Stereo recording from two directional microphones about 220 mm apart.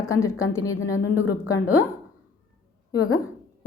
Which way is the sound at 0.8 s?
65° left (ahead or behind).